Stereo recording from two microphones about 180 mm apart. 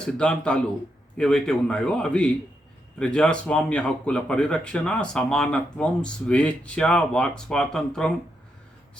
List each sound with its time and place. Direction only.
0.0 s speech: 5° left (ahead or behind)